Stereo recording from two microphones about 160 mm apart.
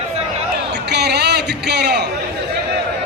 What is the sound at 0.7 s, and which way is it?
A man's voice, 90° right.